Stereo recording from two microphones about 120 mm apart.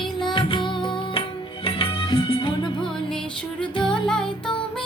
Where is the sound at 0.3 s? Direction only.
45° left (ahead or behind).